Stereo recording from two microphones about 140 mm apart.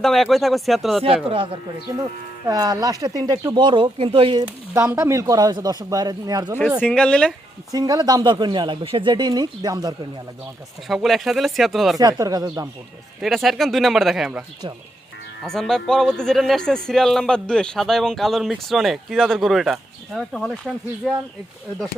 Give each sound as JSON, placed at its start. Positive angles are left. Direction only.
{"t": 0.0, "sound": "speech", "side_deg": 0}
{"t": 1.0, "sound": "speech", "side_deg": -40}
{"t": 2.5, "sound": "speech", "side_deg": -25}
{"t": 4.4, "sound": "speech", "side_deg": -20}
{"t": 6.8, "sound": "speech", "side_deg": 5}
{"t": 7.7, "sound": "speech", "side_deg": -25}
{"t": 10.8, "sound": "speech", "side_deg": 0}
{"t": 11.9, "sound": "speech", "side_deg": -25}
{"t": 13.2, "sound": "speech", "side_deg": 0}
{"t": 15.4, "sound": "speech", "side_deg": 5}